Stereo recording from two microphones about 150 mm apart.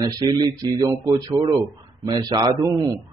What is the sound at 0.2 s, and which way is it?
Speech, 25° right (ahead or behind).